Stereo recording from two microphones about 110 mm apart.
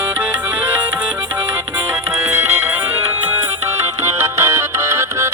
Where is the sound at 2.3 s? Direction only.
20° right (ahead or behind).